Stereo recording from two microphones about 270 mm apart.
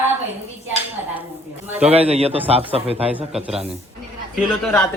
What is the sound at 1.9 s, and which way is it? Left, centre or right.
A man's voice, right.